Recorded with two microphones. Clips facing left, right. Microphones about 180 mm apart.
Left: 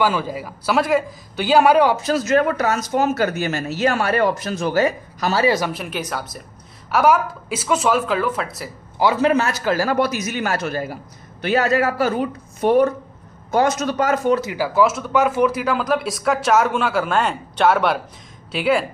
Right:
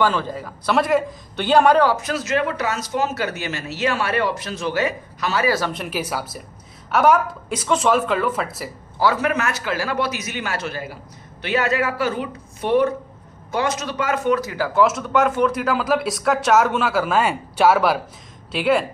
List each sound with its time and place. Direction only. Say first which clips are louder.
0.0 s speech: even; 10° left (ahead or behind)
2.0 s speech: left 5 dB; 35° left (ahead or behind)
5.4 s speech: left 3 dB; 20° left (ahead or behind)
5.7 s speech: even; centre (ahead or behind)
8.9 s speech: left 3 dB; 20° left (ahead or behind); by 14.4 s 40° left (ahead or behind)
14.4 s speech: left 1 dB; 15° left (ahead or behind)
14.7 s speech: even; centre (ahead or behind)